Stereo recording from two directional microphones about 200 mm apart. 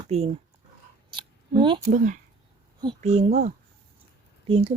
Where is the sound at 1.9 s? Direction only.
40° right (ahead or behind).